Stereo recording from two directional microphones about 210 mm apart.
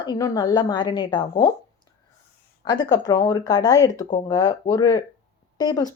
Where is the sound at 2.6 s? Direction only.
20° left (ahead or behind).